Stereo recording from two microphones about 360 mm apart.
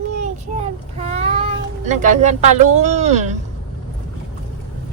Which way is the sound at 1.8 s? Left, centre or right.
Centre.